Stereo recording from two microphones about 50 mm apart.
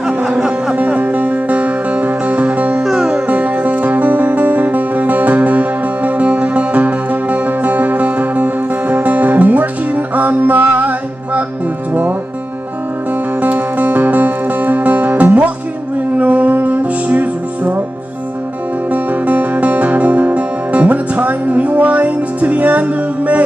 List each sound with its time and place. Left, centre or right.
0.0 s a sound: centre
0.7 s music: right
2.8 s music: centre
3.3 s music: right
13.4 s music: right
18.9 s music: right